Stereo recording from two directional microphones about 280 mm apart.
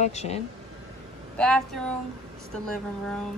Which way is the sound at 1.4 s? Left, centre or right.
Centre.